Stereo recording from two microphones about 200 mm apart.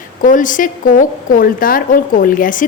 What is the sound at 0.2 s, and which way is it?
A woman's voice, 40° left (ahead or behind).